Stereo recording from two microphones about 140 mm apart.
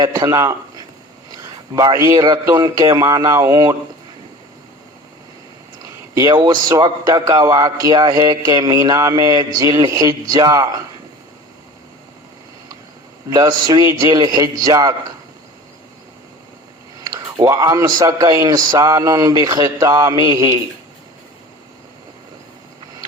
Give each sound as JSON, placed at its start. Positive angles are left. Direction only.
{"t": 0.0, "sound": "a man's voice", "side_deg": -25}
{"t": 1.3, "sound": "a sound", "side_deg": -25}
{"t": 2.1, "sound": "a man's voice", "side_deg": -35}
{"t": 5.8, "sound": "a man's voice", "side_deg": -25}
{"t": 13.3, "sound": "a man's voice", "side_deg": -25}
{"t": 17.0, "sound": "a man's voice", "side_deg": -25}